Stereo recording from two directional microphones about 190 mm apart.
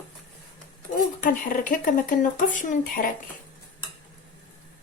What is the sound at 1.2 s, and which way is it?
Speech, 45° left (ahead or behind).